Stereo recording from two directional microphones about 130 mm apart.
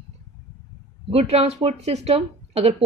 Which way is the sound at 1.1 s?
55° right (ahead or behind).